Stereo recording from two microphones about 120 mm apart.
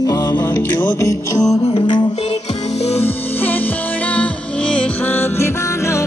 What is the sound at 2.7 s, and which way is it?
Music, 60° left (ahead or behind).